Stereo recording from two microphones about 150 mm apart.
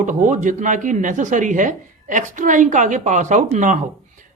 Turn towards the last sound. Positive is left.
turn(degrees=-55)  # may be behind; listen again after turning